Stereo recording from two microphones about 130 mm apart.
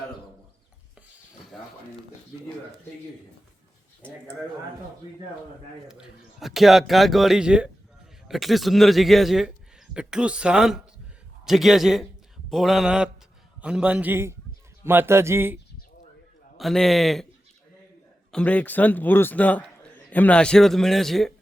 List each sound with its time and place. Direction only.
1.5 s a sound: centre (ahead or behind)
5.9 s a man's voice: 5° right (ahead or behind)
16.6 s a man's voice: centre (ahead or behind)
18.3 s a man's voice: 10° left (ahead or behind)